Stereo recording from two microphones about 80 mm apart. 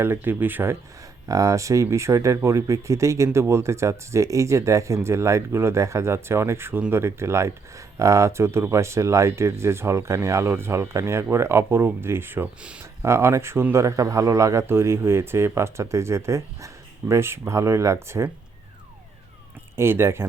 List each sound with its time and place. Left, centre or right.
0.0 s speech: right
1.3 s speech: right
13.8 s speech: right
19.7 s speech: right